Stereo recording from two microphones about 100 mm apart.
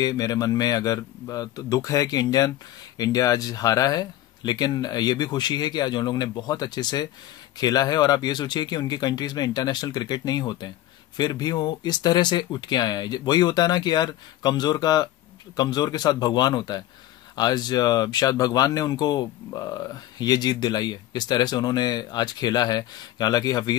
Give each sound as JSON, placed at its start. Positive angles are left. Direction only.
{"t": 0.0, "sound": "speech", "side_deg": 40}